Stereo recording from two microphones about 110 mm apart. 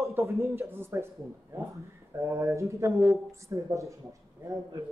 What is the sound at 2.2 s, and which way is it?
A man's voice, 25° right (ahead or behind).